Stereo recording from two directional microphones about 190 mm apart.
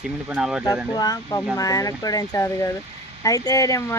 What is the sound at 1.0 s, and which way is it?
Speech, 20° left (ahead or behind).